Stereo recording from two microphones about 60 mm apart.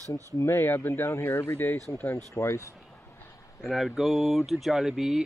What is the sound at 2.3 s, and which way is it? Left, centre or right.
Speech, left.